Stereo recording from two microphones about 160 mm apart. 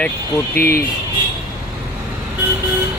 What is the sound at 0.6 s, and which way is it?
Speech, 65° left (ahead or behind).